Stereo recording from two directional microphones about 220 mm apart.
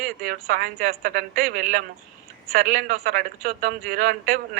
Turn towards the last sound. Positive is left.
turn(degrees=-40)  # may be behind; listen again after turning